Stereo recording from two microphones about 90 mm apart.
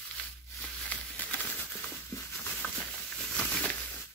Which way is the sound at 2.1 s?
30° left (ahead or behind).